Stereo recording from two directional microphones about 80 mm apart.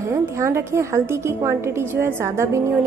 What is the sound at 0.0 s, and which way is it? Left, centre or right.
A woman's voice, right.